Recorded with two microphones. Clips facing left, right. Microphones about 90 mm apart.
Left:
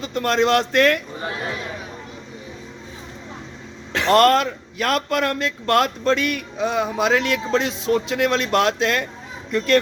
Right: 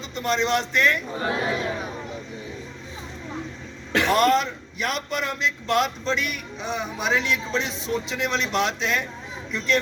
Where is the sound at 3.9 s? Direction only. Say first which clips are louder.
Left 1 dB; 10° right (ahead or behind).